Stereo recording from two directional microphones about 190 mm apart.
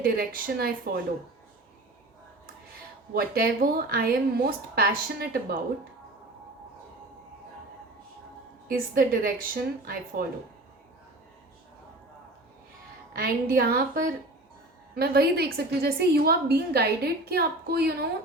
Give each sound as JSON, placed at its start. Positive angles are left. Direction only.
{"t": 0.0, "sound": "a woman's voice", "side_deg": -50}
{"t": 3.2, "sound": "a woman's voice", "side_deg": -50}
{"t": 8.7, "sound": "a woman's voice", "side_deg": -50}
{"t": 13.1, "sound": "a woman's voice", "side_deg": -50}